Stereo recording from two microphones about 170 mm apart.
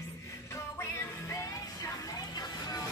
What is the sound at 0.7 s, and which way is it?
Music, 20° left (ahead or behind).